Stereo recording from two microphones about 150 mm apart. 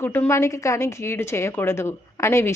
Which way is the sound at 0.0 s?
15° left (ahead or behind).